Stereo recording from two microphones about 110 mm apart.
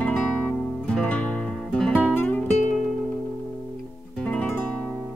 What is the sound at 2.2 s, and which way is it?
Music, 15° left (ahead or behind).